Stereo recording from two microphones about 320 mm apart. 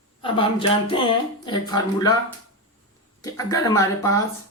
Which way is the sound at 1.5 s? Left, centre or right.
Centre.